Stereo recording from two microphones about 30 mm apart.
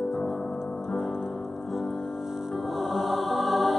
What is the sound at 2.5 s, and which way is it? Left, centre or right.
Music, centre.